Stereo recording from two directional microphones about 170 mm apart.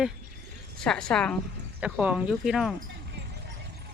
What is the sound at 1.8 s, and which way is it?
Speech, 5° right (ahead or behind).